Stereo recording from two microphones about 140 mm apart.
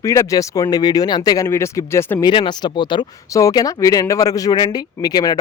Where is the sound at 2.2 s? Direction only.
35° left (ahead or behind).